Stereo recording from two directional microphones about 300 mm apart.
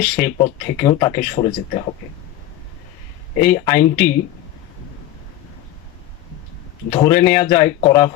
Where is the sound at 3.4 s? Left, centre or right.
Centre.